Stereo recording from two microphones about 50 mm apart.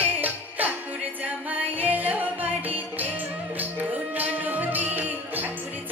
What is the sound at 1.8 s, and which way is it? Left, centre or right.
Music, right.